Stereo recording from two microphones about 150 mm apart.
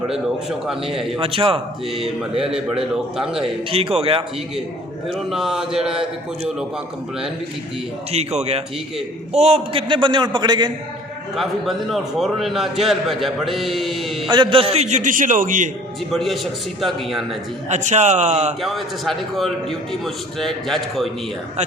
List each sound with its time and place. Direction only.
0.9 s a man's voice: 5° right (ahead or behind)
1.2 s a man's voice: 40° right (ahead or behind)
1.9 s a man's voice: centre (ahead or behind)
3.7 s a man's voice: 40° right (ahead or behind)
5.1 s a man's voice: 5° right (ahead or behind)
8.1 s a man's voice: 45° right (ahead or behind); by 10.7 s 30° right (ahead or behind)
11.3 s a man's voice: centre (ahead or behind)
14.3 s a man's voice: 35° right (ahead or behind); by 15.7 s 60° right (ahead or behind)
16.1 s a man's voice: centre (ahead or behind)
17.7 s a man's voice: 50° right (ahead or behind)
18.6 s a man's voice: centre (ahead or behind)